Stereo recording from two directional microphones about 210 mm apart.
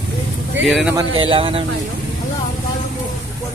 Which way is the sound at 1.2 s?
25° right (ahead or behind).